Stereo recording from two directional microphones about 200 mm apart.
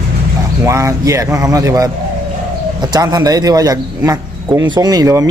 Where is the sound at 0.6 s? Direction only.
15° right (ahead or behind).